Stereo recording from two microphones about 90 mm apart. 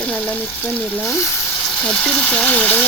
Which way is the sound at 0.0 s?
15° left (ahead or behind).